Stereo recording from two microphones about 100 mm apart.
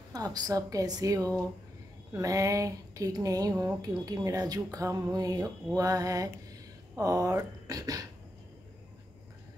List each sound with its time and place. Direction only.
0.1 s speech: 40° right (ahead or behind)